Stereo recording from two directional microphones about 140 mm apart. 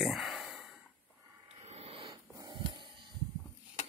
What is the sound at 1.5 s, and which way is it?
Vehicle, 50° right (ahead or behind).